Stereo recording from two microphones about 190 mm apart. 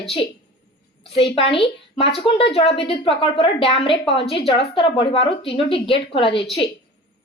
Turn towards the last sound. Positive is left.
turn(degrees=30)  # may be behind; listen again after turning